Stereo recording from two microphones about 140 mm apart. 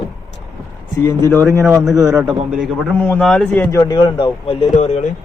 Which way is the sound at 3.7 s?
20° left (ahead or behind).